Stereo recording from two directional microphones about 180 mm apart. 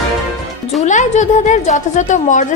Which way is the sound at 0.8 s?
40° left (ahead or behind).